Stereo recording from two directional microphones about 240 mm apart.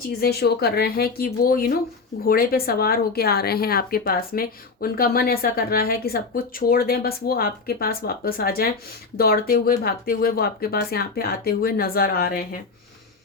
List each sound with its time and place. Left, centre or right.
0.2 s speech: left